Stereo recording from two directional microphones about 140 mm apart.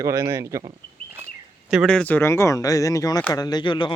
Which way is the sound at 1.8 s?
10° left (ahead or behind).